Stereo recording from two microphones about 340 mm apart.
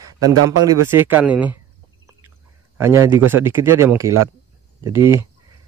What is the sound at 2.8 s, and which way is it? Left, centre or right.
Speech, centre.